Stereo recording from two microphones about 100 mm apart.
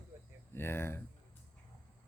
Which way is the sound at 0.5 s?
25° left (ahead or behind).